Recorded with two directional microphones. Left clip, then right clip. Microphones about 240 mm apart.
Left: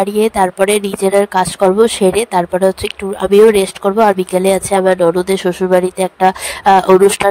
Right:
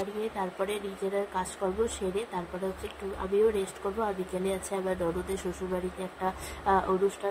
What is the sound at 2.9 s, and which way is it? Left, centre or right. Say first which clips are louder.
Speech: left 19 dB; left.